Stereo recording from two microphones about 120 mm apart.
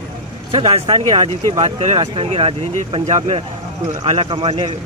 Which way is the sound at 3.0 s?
75° right (ahead or behind).